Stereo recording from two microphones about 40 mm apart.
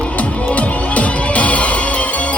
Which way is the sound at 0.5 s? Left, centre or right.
Left.